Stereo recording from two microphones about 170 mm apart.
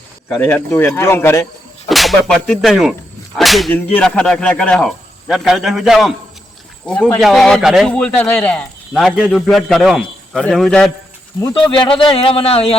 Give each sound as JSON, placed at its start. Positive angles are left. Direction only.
{"t": 0.3, "sound": "speech", "side_deg": 10}
{"t": 1.9, "sound": "speech", "side_deg": 0}
{"t": 11.3, "sound": "speech", "side_deg": 15}
{"t": 11.9, "sound": "speech", "side_deg": 30}